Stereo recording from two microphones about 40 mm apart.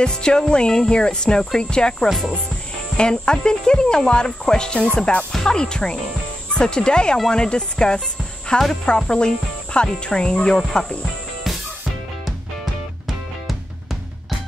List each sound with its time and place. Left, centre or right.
0.0 s speech: left
2.0 s speech: centre
3.0 s speech: left